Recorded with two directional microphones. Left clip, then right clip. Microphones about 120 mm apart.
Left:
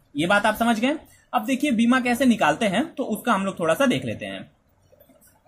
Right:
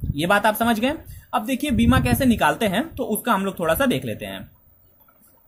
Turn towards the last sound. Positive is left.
turn(degrees=-10)  # may be behind; listen again after turning